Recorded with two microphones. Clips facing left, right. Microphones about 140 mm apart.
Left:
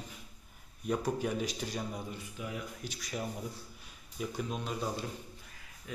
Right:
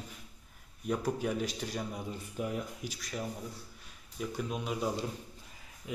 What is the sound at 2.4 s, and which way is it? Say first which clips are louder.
Speech: right 7 dB; 45° right (ahead or behind).